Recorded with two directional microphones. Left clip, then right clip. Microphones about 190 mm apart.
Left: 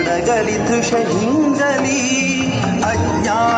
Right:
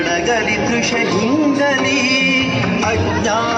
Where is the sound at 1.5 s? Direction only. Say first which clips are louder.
Right 1 dB; 45° left (ahead or behind).